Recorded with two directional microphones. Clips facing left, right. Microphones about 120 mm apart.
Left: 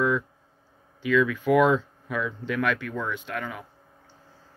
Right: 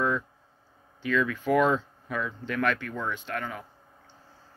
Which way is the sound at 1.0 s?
10° left (ahead or behind).